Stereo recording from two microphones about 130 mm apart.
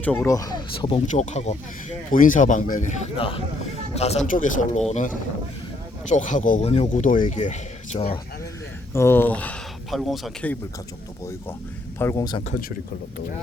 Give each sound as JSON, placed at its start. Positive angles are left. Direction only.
{"t": 0.0, "sound": "speech", "side_deg": 10}
{"t": 0.3, "sound": "speech", "side_deg": 25}
{"t": 1.1, "sound": "speech", "side_deg": 65}
{"t": 3.2, "sound": "speech", "side_deg": 45}
{"t": 4.3, "sound": "speech", "side_deg": 85}
{"t": 4.9, "sound": "speech", "side_deg": 70}
{"t": 6.7, "sound": "speech", "side_deg": 60}
{"t": 7.3, "sound": "speech", "side_deg": 65}
{"t": 7.9, "sound": "speech", "side_deg": 50}
{"t": 8.9, "sound": "speech", "side_deg": 20}
{"t": 11.9, "sound": "a man's voice", "side_deg": 20}
{"t": 12.5, "sound": "speech", "side_deg": 90}